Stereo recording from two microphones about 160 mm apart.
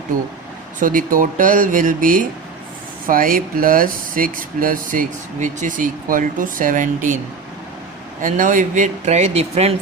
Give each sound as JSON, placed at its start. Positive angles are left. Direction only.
{"t": 0.8, "sound": "speech", "side_deg": -55}
{"t": 8.2, "sound": "speech", "side_deg": -55}